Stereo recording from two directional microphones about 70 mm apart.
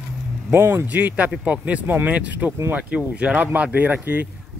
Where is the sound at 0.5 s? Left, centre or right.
Right.